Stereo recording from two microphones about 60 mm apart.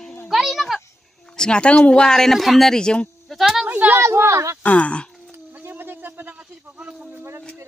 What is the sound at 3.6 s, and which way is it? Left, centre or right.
Speech, right.